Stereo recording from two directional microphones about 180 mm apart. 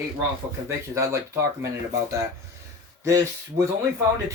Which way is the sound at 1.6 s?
15° right (ahead or behind).